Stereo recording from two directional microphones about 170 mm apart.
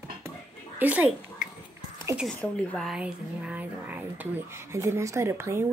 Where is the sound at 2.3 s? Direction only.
Centre (ahead or behind).